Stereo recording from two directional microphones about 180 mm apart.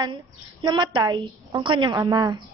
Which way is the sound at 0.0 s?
25° right (ahead or behind).